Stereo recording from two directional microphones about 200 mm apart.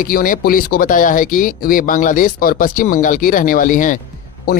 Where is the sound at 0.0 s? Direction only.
45° left (ahead or behind).